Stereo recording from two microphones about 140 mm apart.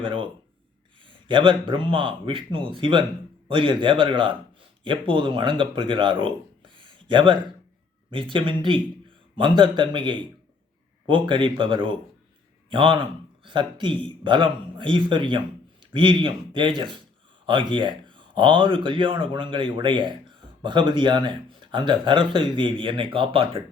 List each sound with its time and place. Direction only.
0.0 s speech: 35° right (ahead or behind)
6.7 s a sound: 35° right (ahead or behind)
8.1 s speech: 35° right (ahead or behind)